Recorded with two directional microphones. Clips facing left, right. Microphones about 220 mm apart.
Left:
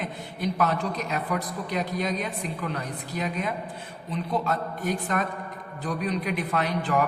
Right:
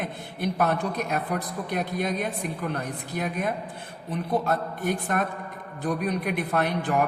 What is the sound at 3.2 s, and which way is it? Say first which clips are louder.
A woman's voice: right 1 dB; 55° right (ahead or behind).